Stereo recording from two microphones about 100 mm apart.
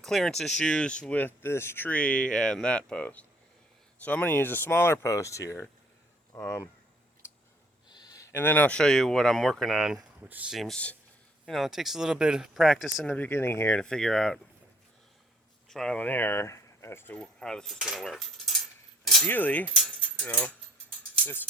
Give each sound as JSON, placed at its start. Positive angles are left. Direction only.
{"t": 0.0, "sound": "speech", "side_deg": 5}
{"t": 1.4, "sound": "speech", "side_deg": 25}
{"t": 7.9, "sound": "a sound", "side_deg": 45}
{"t": 8.4, "sound": "speech", "side_deg": 15}
{"t": 10.2, "sound": "speech", "side_deg": -15}
{"t": 10.5, "sound": "speech", "side_deg": 0}
{"t": 13.1, "sound": "speech", "side_deg": 20}
{"t": 13.7, "sound": "speech", "side_deg": 10}
{"t": 15.7, "sound": "speech", "side_deg": 10}
{"t": 17.2, "sound": "speech", "side_deg": 5}
{"t": 19.2, "sound": "speech", "side_deg": 15}
{"t": 19.7, "sound": "keys jangling", "side_deg": 0}
{"t": 20.2, "sound": "speech", "side_deg": 20}